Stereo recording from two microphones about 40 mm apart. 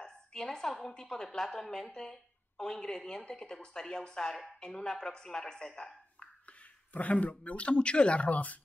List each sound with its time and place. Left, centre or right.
0.0 s a woman's voice: centre
6.9 s speech: left
8.3 s speech: left